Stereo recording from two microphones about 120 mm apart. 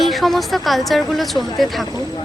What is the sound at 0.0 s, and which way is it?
Speech, centre (ahead or behind).